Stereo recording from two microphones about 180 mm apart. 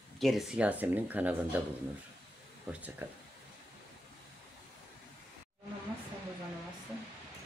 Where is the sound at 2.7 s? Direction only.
10° right (ahead or behind).